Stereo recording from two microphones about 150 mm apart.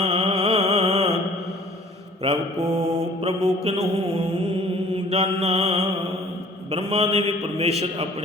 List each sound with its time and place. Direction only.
0.0 s mantra: 40° right (ahead or behind)
2.2 s mantra: 40° right (ahead or behind)
5.0 s a man's voice: 45° right (ahead or behind)